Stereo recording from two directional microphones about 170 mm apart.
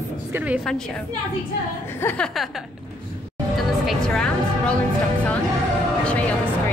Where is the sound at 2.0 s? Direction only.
10° left (ahead or behind).